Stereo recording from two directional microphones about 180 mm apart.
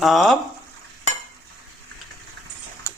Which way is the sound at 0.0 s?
Centre (ahead or behind).